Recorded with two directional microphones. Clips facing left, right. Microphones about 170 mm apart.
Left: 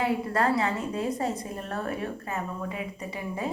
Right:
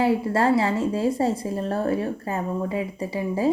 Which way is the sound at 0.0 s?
30° right (ahead or behind).